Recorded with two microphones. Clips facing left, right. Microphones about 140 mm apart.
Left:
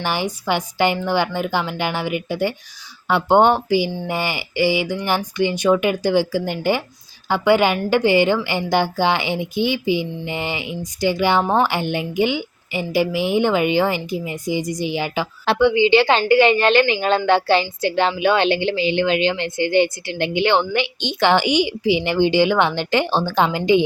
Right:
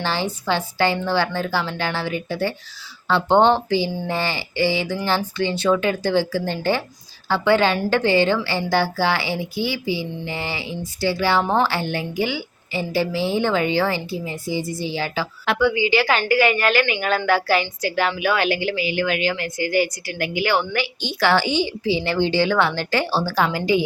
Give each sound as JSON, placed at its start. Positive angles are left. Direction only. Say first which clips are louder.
{"t": 0.0, "sound": "speech", "louder": "left 1 dB", "side_deg": 15}